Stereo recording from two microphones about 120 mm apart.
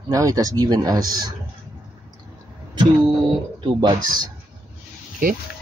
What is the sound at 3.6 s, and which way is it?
Speech, 40° right (ahead or behind).